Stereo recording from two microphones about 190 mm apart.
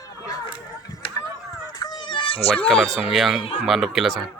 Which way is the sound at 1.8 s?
25° left (ahead or behind).